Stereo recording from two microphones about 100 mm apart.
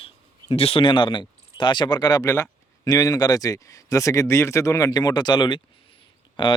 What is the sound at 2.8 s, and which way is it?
Speech, 40° left (ahead or behind).